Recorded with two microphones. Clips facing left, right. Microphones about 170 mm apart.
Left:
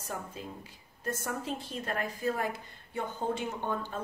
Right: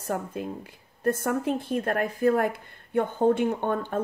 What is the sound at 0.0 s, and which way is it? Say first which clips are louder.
A woman's voice: right 9 dB; 60° right (ahead or behind).